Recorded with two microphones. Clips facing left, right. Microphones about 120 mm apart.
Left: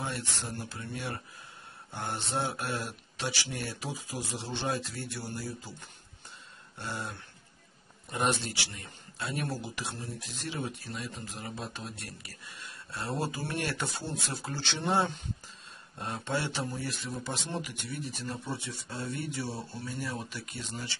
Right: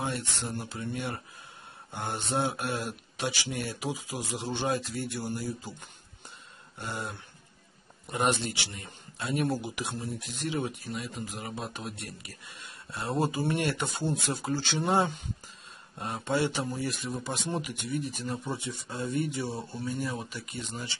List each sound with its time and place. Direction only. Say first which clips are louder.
0.0 s speech: right 3 dB; 20° right (ahead or behind)
6.8 s speech: right 2 dB; 15° right (ahead or behind)